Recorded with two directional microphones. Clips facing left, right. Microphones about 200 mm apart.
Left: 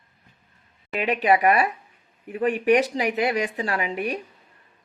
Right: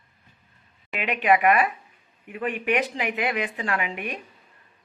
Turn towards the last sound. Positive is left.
turn(degrees=35)  # may be behind; listen again after turning